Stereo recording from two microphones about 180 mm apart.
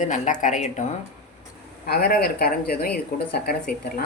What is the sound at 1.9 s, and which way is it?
Speech, 60° left (ahead or behind).